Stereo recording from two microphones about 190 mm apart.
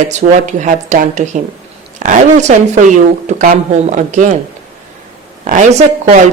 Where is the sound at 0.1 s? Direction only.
40° right (ahead or behind).